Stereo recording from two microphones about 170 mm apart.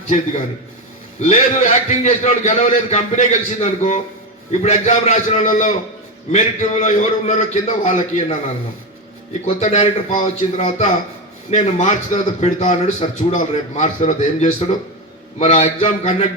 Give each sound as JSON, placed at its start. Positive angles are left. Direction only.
{"t": 1.2, "sound": "a man's voice", "side_deg": 40}
{"t": 9.5, "sound": "a man's voice", "side_deg": 45}